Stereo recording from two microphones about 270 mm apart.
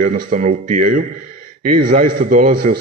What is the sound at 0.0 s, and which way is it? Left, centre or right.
A man's voice, right.